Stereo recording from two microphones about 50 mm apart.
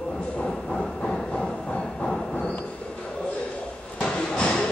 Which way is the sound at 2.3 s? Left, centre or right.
Left.